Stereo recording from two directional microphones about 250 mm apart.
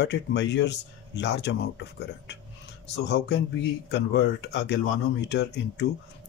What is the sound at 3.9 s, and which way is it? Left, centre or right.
Speech, left.